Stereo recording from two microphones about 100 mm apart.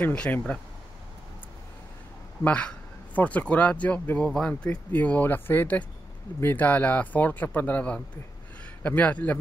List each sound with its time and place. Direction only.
0.0 s speech: 15° left (ahead or behind)
2.4 s speech: 10° left (ahead or behind)